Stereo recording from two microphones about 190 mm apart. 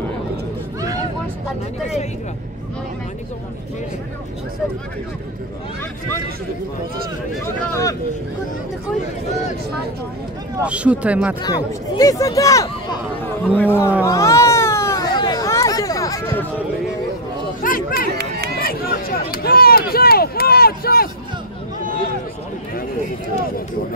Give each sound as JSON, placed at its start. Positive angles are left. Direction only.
{"t": 7.4, "sound": "speech", "side_deg": 15}
{"t": 10.6, "sound": "speech", "side_deg": -5}
{"t": 11.4, "sound": "speech", "side_deg": 20}
{"t": 14.0, "sound": "cat", "side_deg": 15}
{"t": 17.6, "sound": "a sound", "side_deg": 45}
{"t": 18.1, "sound": "run", "side_deg": -55}
{"t": 18.6, "sound": "a sound", "side_deg": 50}